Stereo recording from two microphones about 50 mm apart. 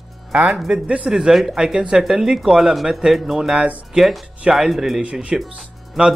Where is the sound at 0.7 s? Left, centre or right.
Right.